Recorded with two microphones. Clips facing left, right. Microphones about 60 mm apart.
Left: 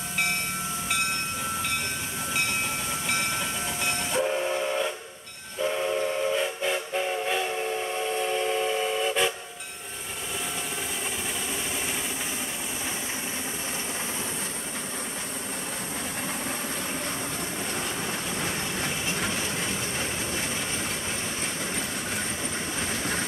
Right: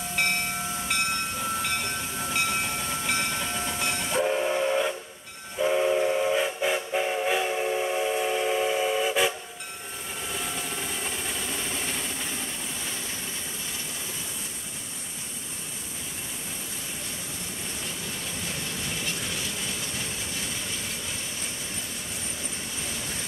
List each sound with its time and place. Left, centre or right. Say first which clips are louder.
2.9 s train: even; centre
22.8 s train: left 6 dB; left